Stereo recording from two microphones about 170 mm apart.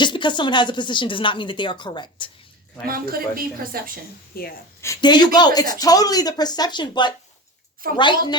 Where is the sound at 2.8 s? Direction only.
60° right (ahead or behind).